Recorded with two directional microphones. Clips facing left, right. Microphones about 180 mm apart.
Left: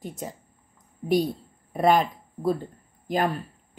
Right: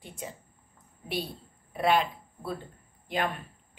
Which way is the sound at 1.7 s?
45° left (ahead or behind).